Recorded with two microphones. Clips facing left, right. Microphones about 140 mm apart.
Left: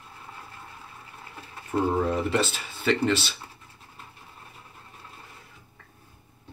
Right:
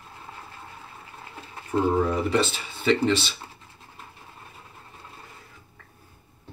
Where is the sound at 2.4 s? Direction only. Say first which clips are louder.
Right 2 dB; 40° left (ahead or behind).